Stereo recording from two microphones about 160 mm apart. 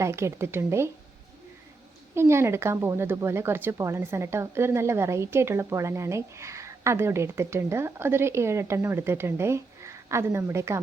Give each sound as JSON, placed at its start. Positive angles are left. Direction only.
{"t": 0.0, "sound": "speech", "side_deg": -20}
{"t": 2.1, "sound": "speech", "side_deg": -15}